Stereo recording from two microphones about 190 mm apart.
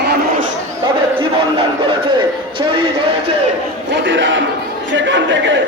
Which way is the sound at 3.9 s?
75° right (ahead or behind).